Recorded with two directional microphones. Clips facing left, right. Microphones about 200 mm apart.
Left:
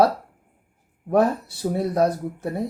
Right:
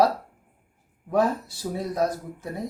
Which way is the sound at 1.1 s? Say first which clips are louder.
Left 3 dB; 60° left (ahead or behind).